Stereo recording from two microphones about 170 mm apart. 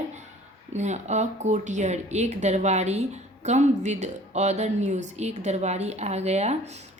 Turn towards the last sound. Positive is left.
turn(degrees=-40)  # may be behind; listen again after turning